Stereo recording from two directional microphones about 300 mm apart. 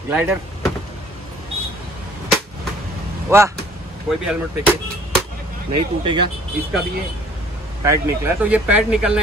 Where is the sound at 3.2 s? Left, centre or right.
Centre.